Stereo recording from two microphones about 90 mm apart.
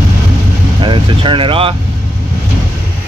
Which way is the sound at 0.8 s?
65° right (ahead or behind).